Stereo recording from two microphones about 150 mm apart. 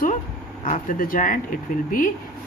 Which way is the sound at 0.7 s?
65° left (ahead or behind).